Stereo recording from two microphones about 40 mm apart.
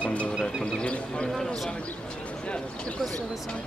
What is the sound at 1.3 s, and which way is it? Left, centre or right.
Speech, centre.